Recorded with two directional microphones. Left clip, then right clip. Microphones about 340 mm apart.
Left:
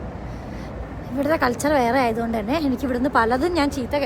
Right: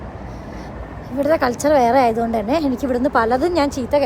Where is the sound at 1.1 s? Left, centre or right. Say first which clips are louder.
Right 4 dB; centre.